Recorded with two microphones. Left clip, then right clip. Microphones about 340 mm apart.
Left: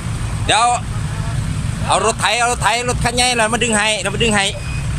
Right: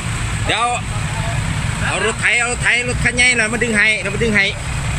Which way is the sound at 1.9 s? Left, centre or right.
Centre.